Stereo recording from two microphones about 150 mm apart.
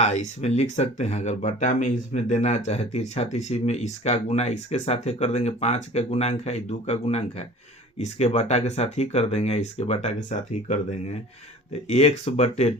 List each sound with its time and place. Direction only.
0.0 s speech: 50° left (ahead or behind)